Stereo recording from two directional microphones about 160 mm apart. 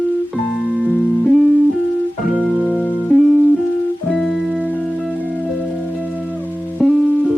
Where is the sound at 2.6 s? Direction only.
10° left (ahead or behind); by 4.9 s 10° right (ahead or behind).